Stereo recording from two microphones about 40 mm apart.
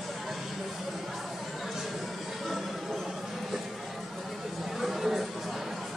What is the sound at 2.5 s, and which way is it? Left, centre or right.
Chatter, centre.